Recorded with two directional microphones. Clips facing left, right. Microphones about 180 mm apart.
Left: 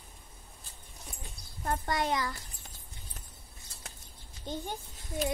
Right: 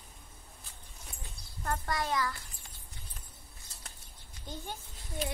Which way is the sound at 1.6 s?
25° left (ahead or behind).